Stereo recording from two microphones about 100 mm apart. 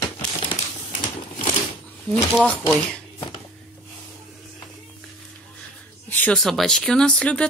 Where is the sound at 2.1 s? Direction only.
10° left (ahead or behind).